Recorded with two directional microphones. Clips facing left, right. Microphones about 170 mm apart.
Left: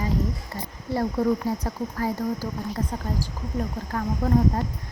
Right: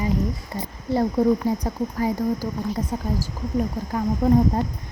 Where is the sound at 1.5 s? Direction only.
15° right (ahead or behind).